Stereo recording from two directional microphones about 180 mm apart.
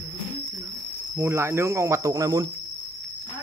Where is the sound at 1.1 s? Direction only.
15° right (ahead or behind).